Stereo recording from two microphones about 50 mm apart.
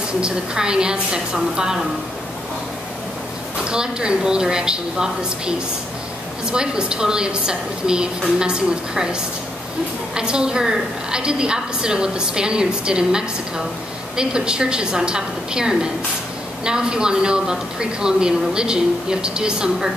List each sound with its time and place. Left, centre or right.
0.2 s a woman's voice: centre
3.6 s a woman's voice: centre
10.1 s a woman's voice: centre